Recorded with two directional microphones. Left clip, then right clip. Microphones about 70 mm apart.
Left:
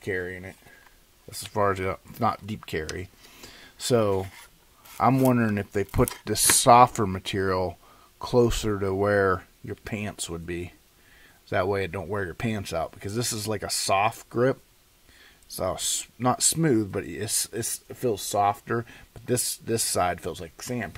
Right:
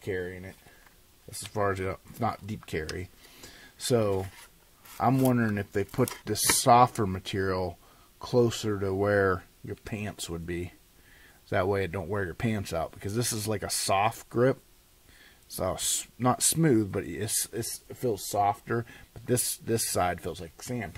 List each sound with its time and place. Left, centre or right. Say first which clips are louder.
0.0 s speech: left 3 dB; left
3.3 s a sound: left 4 dB; left
4.2 s a sound: left 3 dB; centre
5.6 s speech: left 3 dB; left
9.4 s speech: left 3 dB; left
10.0 s speech: left 3 dB; centre
17.6 s speech: left 3 dB; left
18.7 s speech: left 3 dB; centre
20.3 s speech: left 4 dB; left